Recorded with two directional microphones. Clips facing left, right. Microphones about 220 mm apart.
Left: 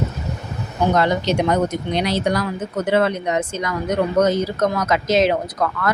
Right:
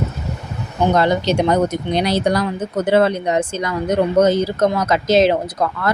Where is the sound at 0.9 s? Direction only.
30° right (ahead or behind).